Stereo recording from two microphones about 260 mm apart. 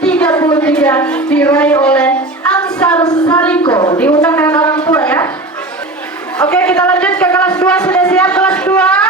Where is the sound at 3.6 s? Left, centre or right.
Centre.